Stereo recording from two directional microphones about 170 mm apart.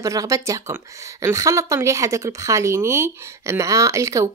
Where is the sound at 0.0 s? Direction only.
20° right (ahead or behind).